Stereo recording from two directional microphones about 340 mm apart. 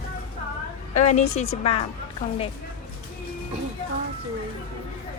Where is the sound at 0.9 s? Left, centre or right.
Left.